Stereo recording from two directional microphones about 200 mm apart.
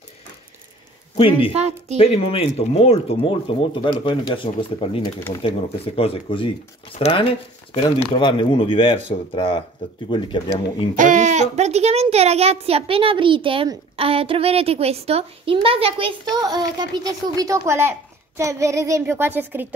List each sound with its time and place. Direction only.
1.1 s speech: 25° left (ahead or behind)
1.5 s speech: 35° right (ahead or behind)
2.0 s speech: 30° left (ahead or behind)
11.0 s a child's voice: 40° right (ahead or behind); by 19.7 s 10° right (ahead or behind)